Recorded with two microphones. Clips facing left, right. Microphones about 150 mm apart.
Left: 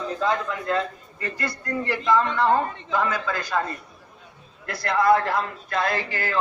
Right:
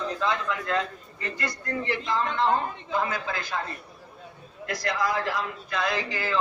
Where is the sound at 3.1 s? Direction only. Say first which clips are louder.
Left 4 dB; 65° left (ahead or behind).